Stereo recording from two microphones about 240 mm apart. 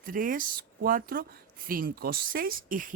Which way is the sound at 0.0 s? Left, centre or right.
Right.